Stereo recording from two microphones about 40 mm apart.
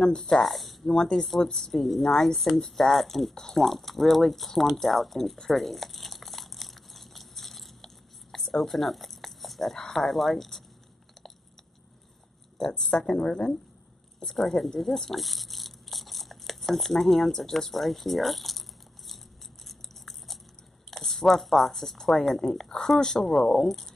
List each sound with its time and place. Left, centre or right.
0.0 s speech: centre
0.4 s speech: centre
3.5 s a sound: centre
12.5 s speech: centre
19.7 s biting: centre
20.9 s speech: centre